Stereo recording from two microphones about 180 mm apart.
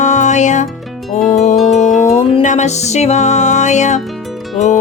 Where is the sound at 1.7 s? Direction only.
40° left (ahead or behind).